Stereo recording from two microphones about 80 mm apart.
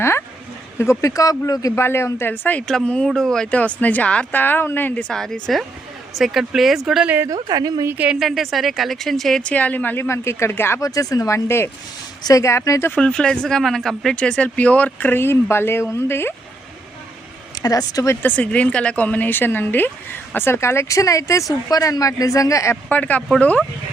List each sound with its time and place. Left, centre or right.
0.8 s a man's voice: left
1.7 s speech: left
2.6 s speech: centre
3.6 s speech: centre
5.1 s speech: centre
7.3 s a woman's voice: right
7.9 s a woman's voice: centre
8.2 s speech: centre
9.4 s speech: centre
10.8 s a man's voice: left
13.0 s speech: centre; by 16.3 s left
17.6 s a man's voice: left
18.1 s a man's voice: left
22.9 s speech: centre